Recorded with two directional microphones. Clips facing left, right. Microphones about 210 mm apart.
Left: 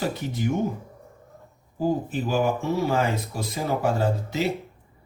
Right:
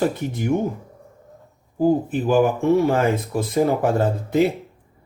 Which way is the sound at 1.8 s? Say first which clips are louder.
Right 6 dB; 55° right (ahead or behind).